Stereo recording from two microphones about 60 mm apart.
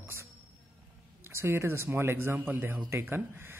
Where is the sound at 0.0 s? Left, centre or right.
Right.